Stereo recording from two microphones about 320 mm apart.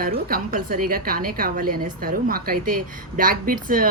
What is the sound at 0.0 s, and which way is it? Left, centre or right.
A woman's voice, right.